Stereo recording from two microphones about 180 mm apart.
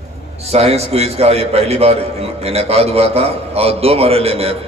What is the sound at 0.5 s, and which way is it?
A man's voice, 35° right (ahead or behind).